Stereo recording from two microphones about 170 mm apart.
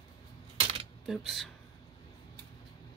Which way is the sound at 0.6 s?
30° right (ahead or behind).